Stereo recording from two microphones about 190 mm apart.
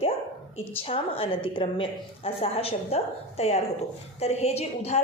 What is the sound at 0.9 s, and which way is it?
A woman's voice, 30° left (ahead or behind).